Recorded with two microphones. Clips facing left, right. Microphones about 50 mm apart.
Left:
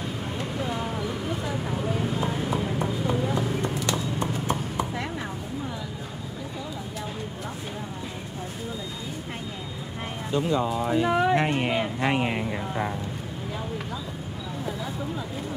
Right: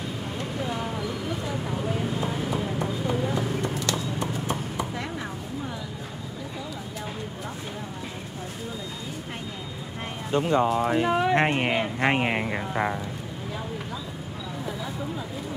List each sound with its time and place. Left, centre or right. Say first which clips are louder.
0.6 s a sound: even; centre
2.0 s vehicle: left 1 dB; centre
2.2 s a sound: left 1 dB; centre
2.5 s clip-clop: left 1 dB; centre
4.2 s horse: left 1 dB; left
10.3 s speech: right 3 dB; right